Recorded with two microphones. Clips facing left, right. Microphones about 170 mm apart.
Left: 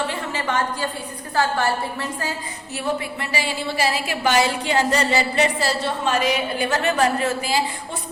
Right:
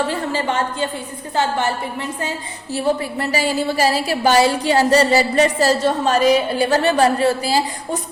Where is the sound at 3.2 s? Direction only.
40° right (ahead or behind).